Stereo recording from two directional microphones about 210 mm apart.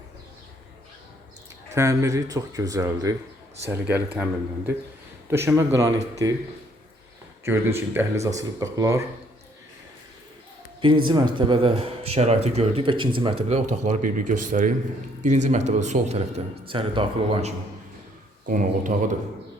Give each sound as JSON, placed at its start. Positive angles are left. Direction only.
{"t": 1.7, "sound": "speech", "side_deg": -15}
{"t": 7.4, "sound": "speech", "side_deg": -10}
{"t": 10.8, "sound": "a man's voice", "side_deg": -25}
{"t": 18.4, "sound": "speech", "side_deg": -40}